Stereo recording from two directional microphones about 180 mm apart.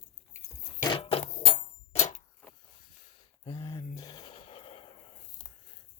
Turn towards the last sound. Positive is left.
turn(degrees=30)  # may be behind; listen again after turning